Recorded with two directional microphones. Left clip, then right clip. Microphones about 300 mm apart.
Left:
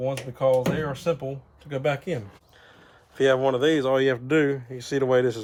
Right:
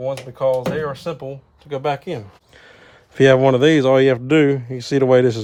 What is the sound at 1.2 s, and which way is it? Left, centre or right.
Speech, centre.